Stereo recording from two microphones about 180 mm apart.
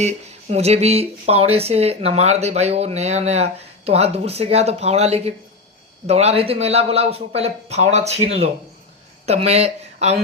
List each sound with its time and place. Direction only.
0.0 s speech: 35° right (ahead or behind)